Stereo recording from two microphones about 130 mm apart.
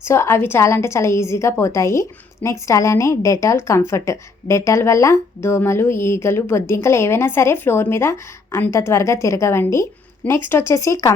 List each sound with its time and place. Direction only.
0.0 s a woman's voice: 20° left (ahead or behind)